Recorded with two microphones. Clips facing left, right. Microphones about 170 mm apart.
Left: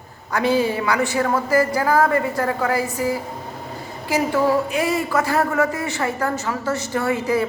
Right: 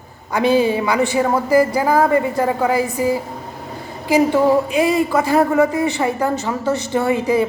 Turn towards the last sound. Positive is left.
turn(degrees=-20)  # may be behind; listen again after turning